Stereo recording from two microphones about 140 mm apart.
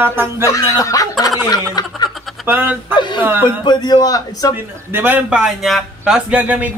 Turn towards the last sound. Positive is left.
turn(degrees=-10)  # may be behind; listen again after turning